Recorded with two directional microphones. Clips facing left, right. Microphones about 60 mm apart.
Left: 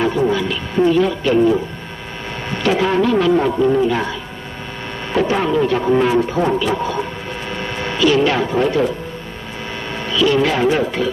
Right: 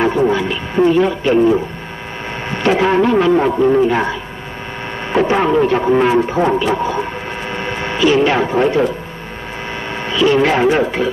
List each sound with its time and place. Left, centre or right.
0.3 s a man's voice: right
7.4 s vehicle: right
9.9 s speech: right